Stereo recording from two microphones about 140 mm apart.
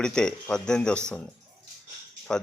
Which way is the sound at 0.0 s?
5° left (ahead or behind).